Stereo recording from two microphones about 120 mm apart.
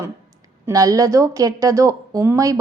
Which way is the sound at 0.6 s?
30° right (ahead or behind).